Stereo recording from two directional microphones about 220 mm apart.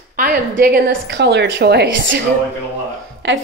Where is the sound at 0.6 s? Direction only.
45° right (ahead or behind).